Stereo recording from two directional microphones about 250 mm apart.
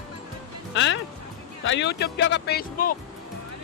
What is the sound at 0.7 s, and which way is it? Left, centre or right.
Speech, left.